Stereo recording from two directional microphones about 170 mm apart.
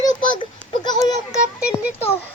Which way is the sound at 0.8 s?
25° left (ahead or behind).